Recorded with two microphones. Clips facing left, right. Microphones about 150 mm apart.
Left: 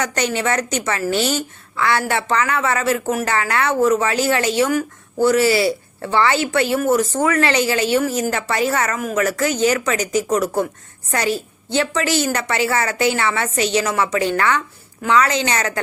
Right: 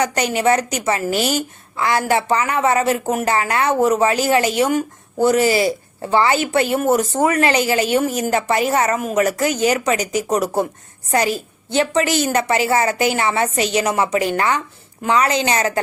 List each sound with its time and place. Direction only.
0.0 s a woman's voice: 15° right (ahead or behind)
2.2 s a woman's voice: 20° right (ahead or behind)
11.7 s a woman's voice: 15° right (ahead or behind)
12.6 s speech: 30° right (ahead or behind)
12.9 s a woman's voice: 15° right (ahead or behind)
15.0 s a woman's voice: 35° right (ahead or behind)
15.3 s a woman's voice: 15° right (ahead or behind)
15.5 s a woman's voice: 30° right (ahead or behind)